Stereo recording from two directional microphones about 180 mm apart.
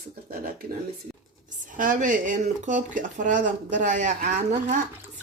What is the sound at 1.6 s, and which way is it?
Speech, 45° right (ahead or behind).